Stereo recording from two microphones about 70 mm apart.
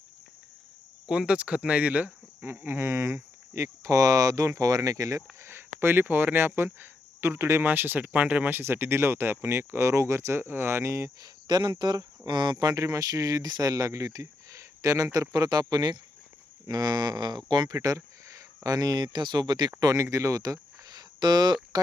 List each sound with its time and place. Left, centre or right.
1.0 s speech: centre
2.6 s speech: right
5.5 s speech: right
7.7 s speech: right
11.2 s speech: right
12.7 s speech: right
17.7 s speech: right
19.8 s speech: right